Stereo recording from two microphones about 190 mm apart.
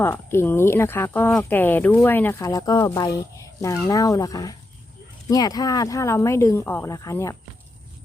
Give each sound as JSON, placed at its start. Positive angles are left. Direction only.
{"t": 0.0, "sound": "speech", "side_deg": 10}